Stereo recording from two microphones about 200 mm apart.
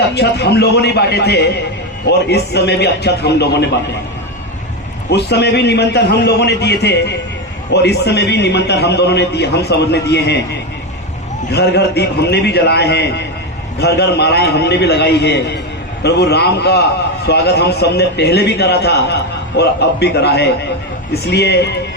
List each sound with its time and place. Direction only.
0.1 s a man's voice: 55° left (ahead or behind)
5.1 s a man's voice: 55° left (ahead or behind)